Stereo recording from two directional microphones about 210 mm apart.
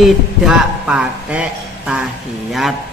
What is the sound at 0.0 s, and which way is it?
Speech, 5° right (ahead or behind).